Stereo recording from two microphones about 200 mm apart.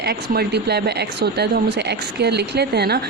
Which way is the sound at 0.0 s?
50° right (ahead or behind).